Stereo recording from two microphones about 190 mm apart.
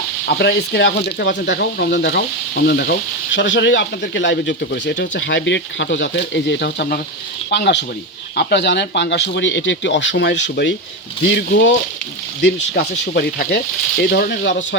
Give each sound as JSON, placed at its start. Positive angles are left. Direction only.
{"t": 0.3, "sound": "speech", "side_deg": 60}